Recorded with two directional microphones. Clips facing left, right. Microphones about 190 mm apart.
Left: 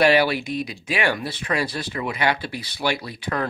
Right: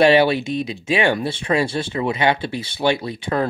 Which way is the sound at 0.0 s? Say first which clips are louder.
Right 4 dB; 25° right (ahead or behind).